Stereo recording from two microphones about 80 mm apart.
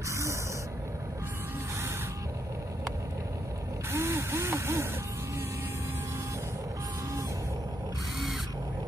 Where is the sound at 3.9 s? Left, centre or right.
Right.